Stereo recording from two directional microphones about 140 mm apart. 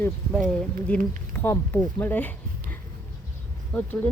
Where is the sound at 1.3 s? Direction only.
15° left (ahead or behind).